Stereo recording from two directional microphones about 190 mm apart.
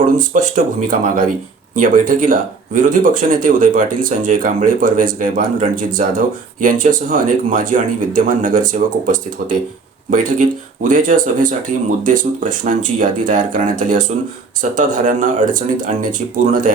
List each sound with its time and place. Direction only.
0.0 s speech: 45° right (ahead or behind)